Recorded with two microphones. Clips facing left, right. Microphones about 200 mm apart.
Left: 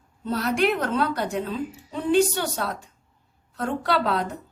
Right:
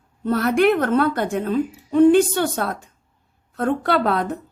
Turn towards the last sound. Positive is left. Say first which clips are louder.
# right 4 dB
turn(degrees=-55)  # may be behind; listen again after turning